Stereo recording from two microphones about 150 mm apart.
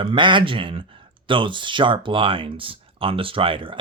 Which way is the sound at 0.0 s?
35° right (ahead or behind).